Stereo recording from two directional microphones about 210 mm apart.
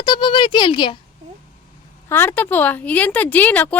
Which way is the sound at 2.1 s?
10° left (ahead or behind).